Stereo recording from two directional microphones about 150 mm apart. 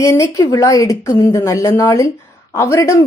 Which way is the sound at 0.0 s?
20° left (ahead or behind).